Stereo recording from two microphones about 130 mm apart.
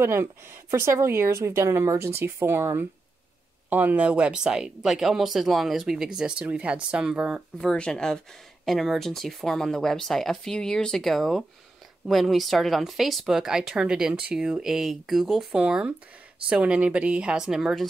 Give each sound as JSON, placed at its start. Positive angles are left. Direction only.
{"t": 0.0, "sound": "speech", "side_deg": -20}